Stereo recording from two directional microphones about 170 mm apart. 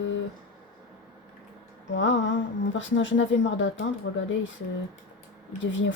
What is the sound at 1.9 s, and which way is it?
Speech, 90° left.